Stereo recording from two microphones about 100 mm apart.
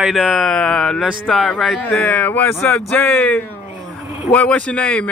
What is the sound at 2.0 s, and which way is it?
Speech, 15° left (ahead or behind).